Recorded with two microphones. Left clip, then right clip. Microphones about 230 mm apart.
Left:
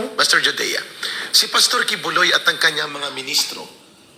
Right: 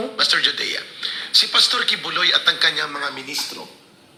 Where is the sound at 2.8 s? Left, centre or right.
Centre.